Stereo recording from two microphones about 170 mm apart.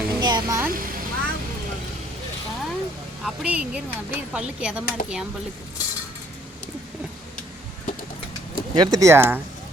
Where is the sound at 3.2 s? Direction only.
5° right (ahead or behind).